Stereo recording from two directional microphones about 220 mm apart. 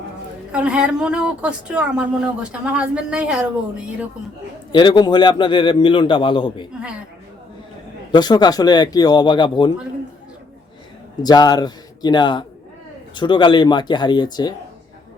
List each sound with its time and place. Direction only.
0.5 s speech: 5° right (ahead or behind)
4.7 s a man's voice: 20° left (ahead or behind)
8.1 s a man's voice: 20° left (ahead or behind)
11.2 s a man's voice: 20° left (ahead or behind)